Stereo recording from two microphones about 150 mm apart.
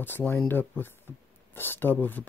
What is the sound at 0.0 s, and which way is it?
Speech, 15° left (ahead or behind).